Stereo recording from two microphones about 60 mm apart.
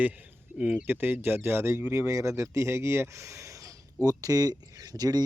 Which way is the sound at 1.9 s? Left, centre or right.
Right.